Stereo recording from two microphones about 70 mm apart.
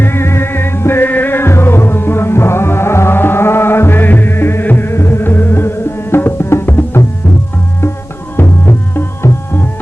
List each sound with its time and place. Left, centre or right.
0.0 s music: left
8.4 s music: left